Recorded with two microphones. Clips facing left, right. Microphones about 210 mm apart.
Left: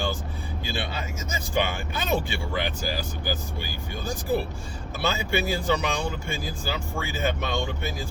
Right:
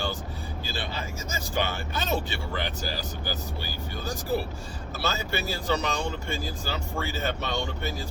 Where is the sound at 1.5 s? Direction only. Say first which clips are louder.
Left 3 dB; 15° left (ahead or behind).